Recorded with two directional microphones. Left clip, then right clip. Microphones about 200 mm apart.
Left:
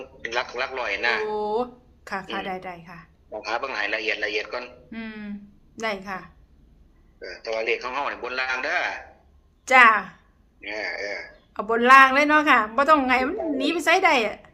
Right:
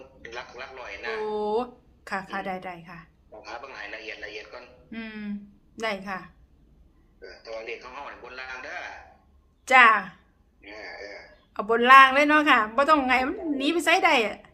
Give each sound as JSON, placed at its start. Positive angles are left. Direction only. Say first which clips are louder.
{"t": 0.2, "sound": "a man's voice", "louder": "left 12 dB", "side_deg": 60}
{"t": 1.2, "sound": "a woman's voice", "louder": "left 2 dB", "side_deg": 0}
{"t": 3.3, "sound": "a man's voice", "louder": "left 11 dB", "side_deg": 55}
{"t": 4.9, "sound": "a woman's voice", "louder": "left 1 dB", "side_deg": 0}
{"t": 7.2, "sound": "a man's voice", "louder": "left 9 dB", "side_deg": 60}
{"t": 9.6, "sound": "a woman's voice", "louder": "left 2 dB", "side_deg": 0}
{"t": 10.6, "sound": "a man's voice", "louder": "left 10 dB", "side_deg": 60}
{"t": 11.5, "sound": "a woman's voice", "louder": "even", "side_deg": 0}